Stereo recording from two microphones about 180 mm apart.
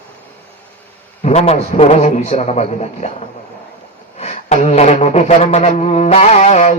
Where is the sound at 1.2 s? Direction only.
35° left (ahead or behind).